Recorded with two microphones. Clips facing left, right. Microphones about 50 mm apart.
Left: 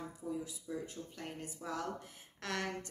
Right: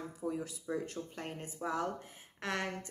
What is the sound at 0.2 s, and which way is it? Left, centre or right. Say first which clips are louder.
Speech: right 4 dB; right.